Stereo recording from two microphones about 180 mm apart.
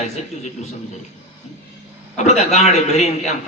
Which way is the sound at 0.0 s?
40° left (ahead or behind).